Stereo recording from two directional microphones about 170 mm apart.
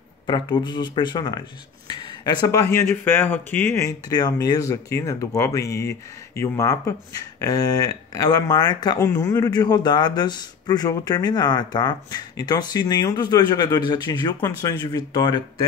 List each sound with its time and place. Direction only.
0.3 s speech: 25° left (ahead or behind)